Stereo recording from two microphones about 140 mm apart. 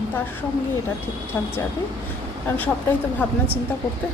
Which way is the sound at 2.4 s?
10° left (ahead or behind).